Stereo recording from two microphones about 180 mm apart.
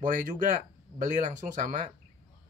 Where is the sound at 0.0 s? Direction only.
45° right (ahead or behind).